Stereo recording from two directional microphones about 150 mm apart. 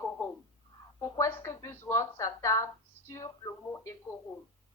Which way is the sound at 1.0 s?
20° left (ahead or behind).